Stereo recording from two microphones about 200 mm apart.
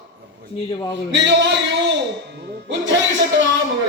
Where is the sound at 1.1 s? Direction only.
60° right (ahead or behind).